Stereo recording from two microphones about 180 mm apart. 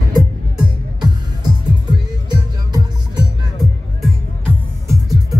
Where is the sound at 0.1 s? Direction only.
20° right (ahead or behind).